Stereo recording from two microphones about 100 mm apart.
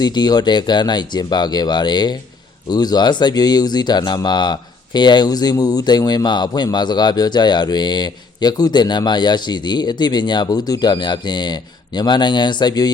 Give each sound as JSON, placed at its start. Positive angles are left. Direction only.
{"t": 0.0, "sound": "speech", "side_deg": 45}